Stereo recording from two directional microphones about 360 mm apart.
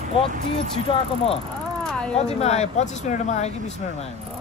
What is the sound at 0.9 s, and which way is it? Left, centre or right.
Speech, centre.